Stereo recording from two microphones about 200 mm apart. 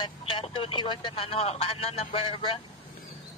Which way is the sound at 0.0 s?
25° left (ahead or behind).